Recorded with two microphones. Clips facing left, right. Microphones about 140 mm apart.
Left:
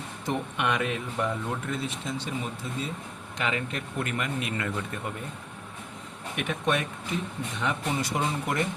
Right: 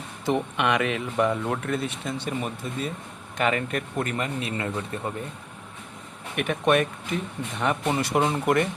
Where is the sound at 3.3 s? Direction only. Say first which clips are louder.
Right 6 dB; 50° right (ahead or behind); by 5.1 s 30° right (ahead or behind).